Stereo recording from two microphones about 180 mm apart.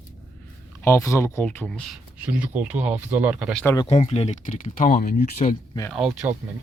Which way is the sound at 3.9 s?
35° left (ahead or behind).